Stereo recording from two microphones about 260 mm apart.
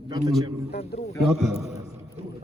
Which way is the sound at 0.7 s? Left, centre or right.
Left.